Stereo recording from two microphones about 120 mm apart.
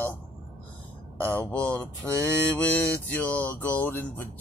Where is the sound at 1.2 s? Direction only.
10° left (ahead or behind).